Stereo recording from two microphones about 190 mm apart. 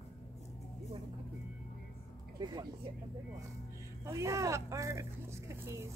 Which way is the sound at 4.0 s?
15° right (ahead or behind).